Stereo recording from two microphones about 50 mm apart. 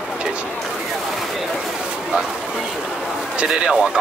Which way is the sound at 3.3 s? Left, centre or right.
Centre.